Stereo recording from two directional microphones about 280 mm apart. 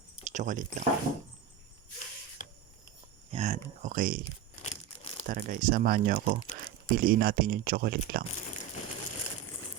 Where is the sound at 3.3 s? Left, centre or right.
Right.